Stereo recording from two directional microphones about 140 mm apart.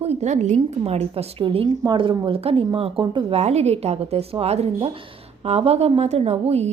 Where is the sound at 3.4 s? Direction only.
50° right (ahead or behind).